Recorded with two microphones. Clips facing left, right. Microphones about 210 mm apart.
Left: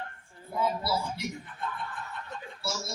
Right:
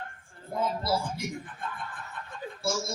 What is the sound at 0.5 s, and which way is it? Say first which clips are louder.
Speech: right 1 dB; 50° right (ahead or behind).